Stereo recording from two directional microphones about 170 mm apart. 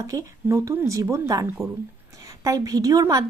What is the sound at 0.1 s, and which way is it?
A woman's voice, 15° right (ahead or behind).